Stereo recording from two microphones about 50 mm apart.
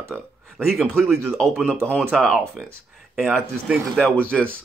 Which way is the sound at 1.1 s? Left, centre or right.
Centre.